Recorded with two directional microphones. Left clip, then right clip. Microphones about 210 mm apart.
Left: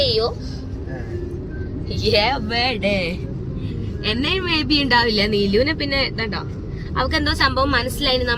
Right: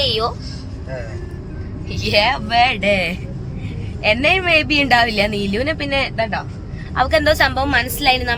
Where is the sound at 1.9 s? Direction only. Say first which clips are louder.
Right 2 dB; 5° right (ahead or behind).